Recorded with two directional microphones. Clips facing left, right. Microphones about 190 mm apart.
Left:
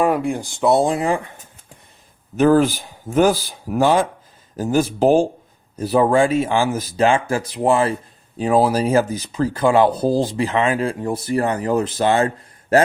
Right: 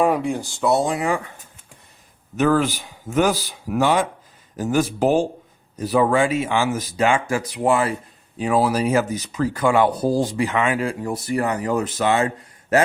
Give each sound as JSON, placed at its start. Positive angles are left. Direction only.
{"t": 0.3, "sound": "speech", "side_deg": 15}
{"t": 0.7, "sound": "speech", "side_deg": 30}
{"t": 2.3, "sound": "speech", "side_deg": 35}